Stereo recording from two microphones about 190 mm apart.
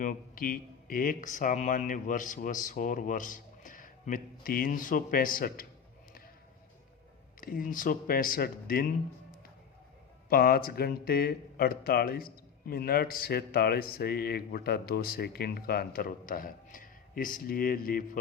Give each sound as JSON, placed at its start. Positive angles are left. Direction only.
{"t": 0.0, "sound": "speech", "side_deg": 45}
{"t": 7.4, "sound": "speech", "side_deg": 45}
{"t": 10.2, "sound": "speech", "side_deg": 50}